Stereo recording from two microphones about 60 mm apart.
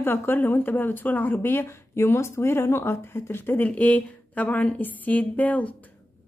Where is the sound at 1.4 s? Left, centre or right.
Left.